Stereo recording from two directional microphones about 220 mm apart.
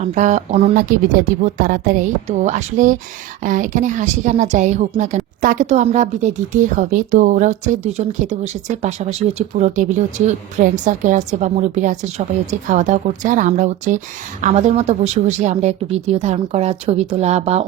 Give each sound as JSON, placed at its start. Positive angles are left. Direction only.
{"t": 0.0, "sound": "a woman's voice", "side_deg": -35}